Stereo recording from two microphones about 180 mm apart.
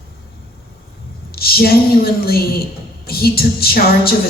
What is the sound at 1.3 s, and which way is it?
A woman's voice, 55° left (ahead or behind).